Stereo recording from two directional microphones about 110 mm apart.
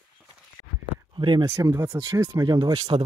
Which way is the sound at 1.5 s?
30° right (ahead or behind).